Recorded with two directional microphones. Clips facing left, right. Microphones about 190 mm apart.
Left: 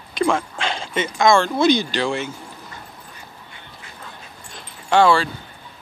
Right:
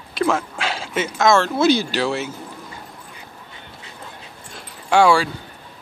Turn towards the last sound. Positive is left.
turn(degrees=-10)  # may be behind; listen again after turning